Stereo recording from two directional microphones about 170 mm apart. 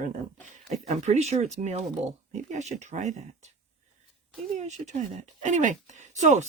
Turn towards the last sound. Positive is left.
turn(degrees=-45)  # may be behind; listen again after turning